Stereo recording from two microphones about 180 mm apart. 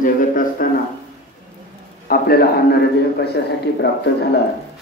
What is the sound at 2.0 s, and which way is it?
A man's voice, 60° left (ahead or behind).